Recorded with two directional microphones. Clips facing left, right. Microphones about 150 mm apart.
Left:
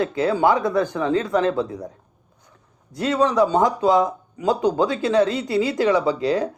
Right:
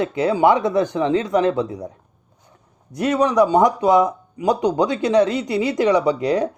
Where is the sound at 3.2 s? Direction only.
20° right (ahead or behind).